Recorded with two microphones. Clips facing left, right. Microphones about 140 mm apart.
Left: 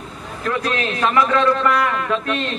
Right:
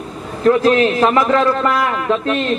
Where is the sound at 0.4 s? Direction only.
30° right (ahead or behind).